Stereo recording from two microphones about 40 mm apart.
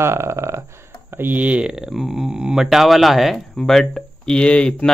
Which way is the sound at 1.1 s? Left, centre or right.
Right.